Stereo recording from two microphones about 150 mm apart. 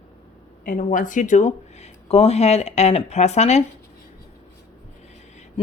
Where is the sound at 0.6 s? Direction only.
60° left (ahead or behind).